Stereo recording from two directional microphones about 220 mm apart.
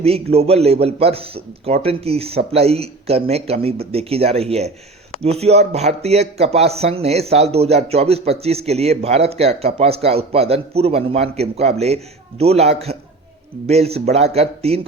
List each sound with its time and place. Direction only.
0.0 s speech: 25° right (ahead or behind)